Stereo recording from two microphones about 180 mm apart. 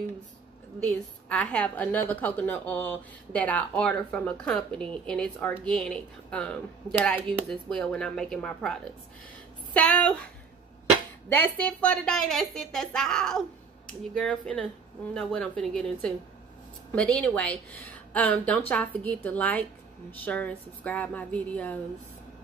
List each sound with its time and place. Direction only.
0.8 s a woman's voice: 5° left (ahead or behind)
9.8 s a woman's voice: 5° left (ahead or behind)
11.2 s a woman's voice: 10° left (ahead or behind)